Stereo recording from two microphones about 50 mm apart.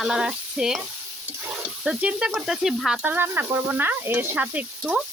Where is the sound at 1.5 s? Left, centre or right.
Centre.